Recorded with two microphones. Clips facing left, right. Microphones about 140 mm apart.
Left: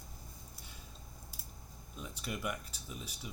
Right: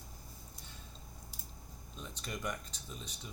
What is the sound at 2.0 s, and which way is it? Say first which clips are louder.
Speech: left 2 dB; 10° left (ahead or behind).